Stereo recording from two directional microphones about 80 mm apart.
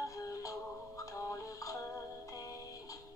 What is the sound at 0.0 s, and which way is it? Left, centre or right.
Music, left.